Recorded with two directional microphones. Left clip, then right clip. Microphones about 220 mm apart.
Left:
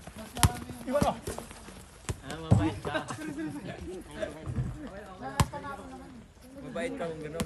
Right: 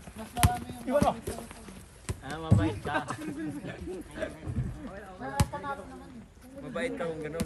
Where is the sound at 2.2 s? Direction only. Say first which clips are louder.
Even; 20° right (ahead or behind).